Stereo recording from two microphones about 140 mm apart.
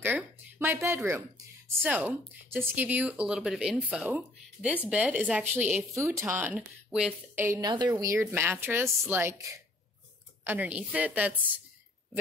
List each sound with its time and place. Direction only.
0.0 s speech: 15° right (ahead or behind)
6.5 s speech: 5° right (ahead or behind)
7.3 s a woman's voice: 20° right (ahead or behind)